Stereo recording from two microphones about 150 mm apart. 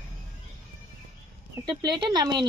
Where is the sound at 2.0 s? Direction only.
30° right (ahead or behind).